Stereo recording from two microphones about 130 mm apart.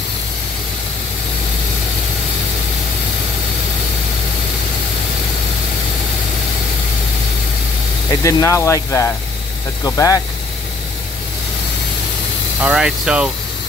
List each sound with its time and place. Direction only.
8.1 s speech: 25° left (ahead or behind)
12.6 s speech: 5° right (ahead or behind)